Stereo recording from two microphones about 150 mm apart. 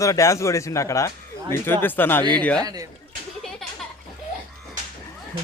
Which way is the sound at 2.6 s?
25° right (ahead or behind).